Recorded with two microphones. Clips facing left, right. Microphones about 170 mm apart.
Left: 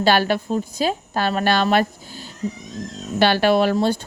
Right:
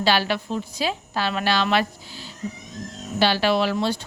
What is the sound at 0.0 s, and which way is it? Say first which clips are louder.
A woman's voice: left 4 dB; 50° left (ahead or behind).